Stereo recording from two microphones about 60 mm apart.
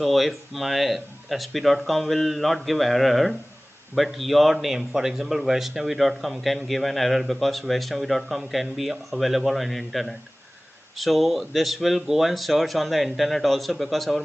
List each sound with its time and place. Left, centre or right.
0.0 s speech: centre